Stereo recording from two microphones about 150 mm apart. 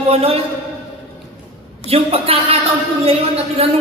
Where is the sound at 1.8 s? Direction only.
40° right (ahead or behind).